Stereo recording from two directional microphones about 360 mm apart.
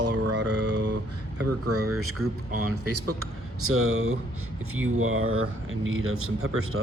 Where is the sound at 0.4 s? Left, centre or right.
Right.